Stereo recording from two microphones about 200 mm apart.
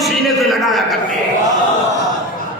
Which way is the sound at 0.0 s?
Centre (ahead or behind).